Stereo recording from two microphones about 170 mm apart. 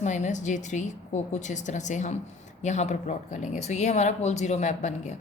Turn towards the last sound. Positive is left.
turn(degrees=45)  # may be behind; listen again after turning